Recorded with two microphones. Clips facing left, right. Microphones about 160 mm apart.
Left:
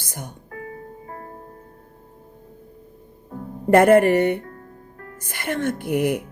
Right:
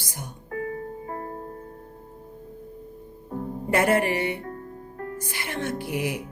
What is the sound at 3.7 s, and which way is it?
Music, 55° left (ahead or behind).